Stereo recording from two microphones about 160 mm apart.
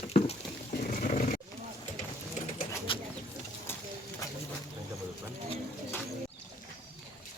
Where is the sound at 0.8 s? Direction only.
55° left (ahead or behind).